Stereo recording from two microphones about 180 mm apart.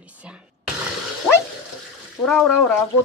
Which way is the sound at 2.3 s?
Centre (ahead or behind).